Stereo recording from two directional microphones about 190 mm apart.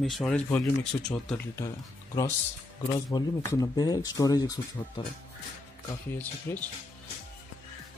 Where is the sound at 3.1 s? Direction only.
20° left (ahead or behind).